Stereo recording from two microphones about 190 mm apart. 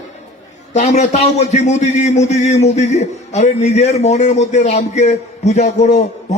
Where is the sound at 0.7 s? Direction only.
35° left (ahead or behind).